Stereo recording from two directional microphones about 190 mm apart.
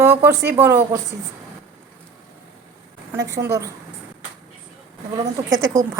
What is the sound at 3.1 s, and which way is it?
Speech, 15° right (ahead or behind).